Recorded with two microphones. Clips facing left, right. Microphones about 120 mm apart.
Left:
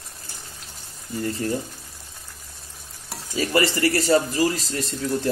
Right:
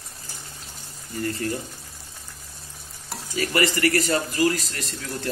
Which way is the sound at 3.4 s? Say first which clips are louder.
Left 1 dB; 30° left (ahead or behind).